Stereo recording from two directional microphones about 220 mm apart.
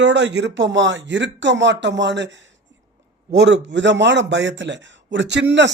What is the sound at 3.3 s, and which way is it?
A man's voice, 50° right (ahead or behind).